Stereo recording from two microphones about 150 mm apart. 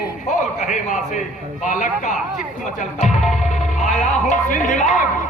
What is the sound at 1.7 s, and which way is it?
Speech, 55° left (ahead or behind).